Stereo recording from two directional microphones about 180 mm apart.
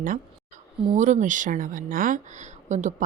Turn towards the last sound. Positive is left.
turn(degrees=-40)  # may be behind; listen again after turning